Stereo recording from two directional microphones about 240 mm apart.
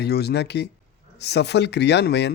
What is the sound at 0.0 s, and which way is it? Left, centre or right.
Speech, left.